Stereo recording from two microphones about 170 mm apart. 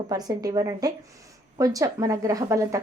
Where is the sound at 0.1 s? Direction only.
20° right (ahead or behind).